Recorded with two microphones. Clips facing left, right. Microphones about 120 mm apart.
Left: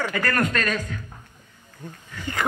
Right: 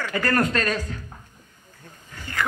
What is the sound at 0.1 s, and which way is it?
Speech, 30° right (ahead or behind).